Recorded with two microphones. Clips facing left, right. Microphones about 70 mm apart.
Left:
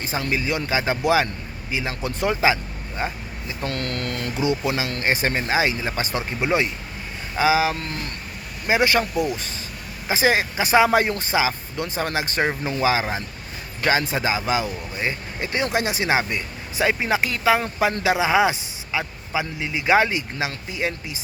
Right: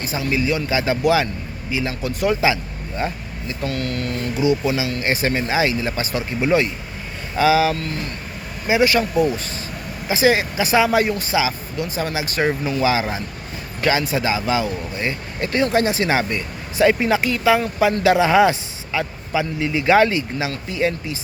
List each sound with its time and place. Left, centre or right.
0.3 s speech: left
3.6 s speech: left
5.0 s speech: left
9.1 s speech: right
10.1 s a man's voice: left
17.1 s speech: left
18.1 s a man's voice: centre